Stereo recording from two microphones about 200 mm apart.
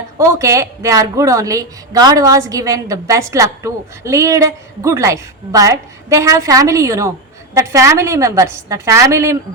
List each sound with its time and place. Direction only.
0.2 s a woman's voice: 15° right (ahead or behind)